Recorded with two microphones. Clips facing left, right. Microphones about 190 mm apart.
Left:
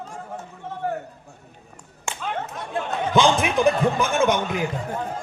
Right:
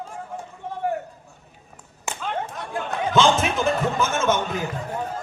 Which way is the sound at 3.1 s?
15° left (ahead or behind).